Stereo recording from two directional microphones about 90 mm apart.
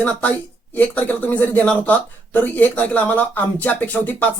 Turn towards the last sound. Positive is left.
turn(degrees=15)  # may be behind; listen again after turning